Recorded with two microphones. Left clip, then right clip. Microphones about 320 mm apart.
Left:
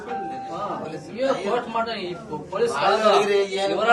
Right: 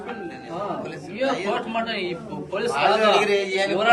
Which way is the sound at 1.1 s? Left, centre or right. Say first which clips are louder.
Left 1 dB; centre.